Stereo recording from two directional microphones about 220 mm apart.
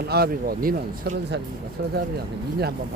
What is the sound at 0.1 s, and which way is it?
Speech, 45° right (ahead or behind).